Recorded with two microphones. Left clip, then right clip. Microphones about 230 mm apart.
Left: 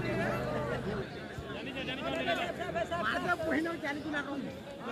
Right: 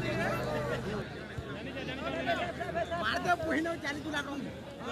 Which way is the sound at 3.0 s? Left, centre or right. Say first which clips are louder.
Right 3 dB; right.